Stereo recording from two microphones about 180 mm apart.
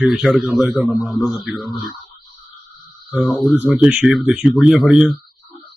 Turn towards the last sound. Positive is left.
turn(degrees=-5)  # may be behind; listen again after turning